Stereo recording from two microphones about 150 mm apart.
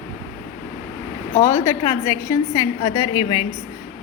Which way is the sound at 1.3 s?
15° left (ahead or behind).